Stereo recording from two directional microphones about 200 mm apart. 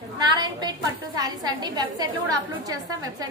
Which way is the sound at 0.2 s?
20° right (ahead or behind).